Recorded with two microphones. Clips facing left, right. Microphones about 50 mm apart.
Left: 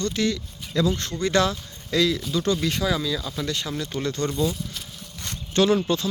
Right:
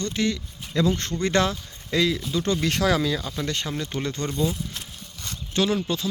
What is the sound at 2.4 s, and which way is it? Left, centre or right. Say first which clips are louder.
Speech: left 1 dB; right.